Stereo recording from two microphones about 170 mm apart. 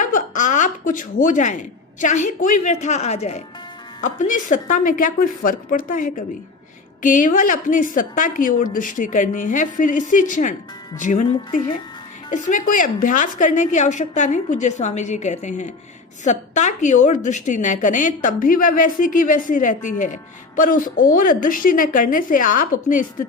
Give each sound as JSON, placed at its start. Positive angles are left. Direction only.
{"t": 0.0, "sound": "a woman's voice", "side_deg": 50}